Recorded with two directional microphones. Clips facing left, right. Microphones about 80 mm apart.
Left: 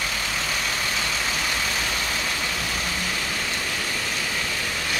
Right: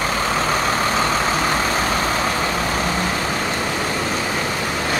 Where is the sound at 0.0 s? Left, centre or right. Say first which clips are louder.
Right 9 dB; right.